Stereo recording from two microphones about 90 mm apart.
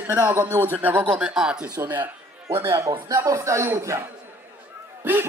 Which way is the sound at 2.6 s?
35° right (ahead or behind).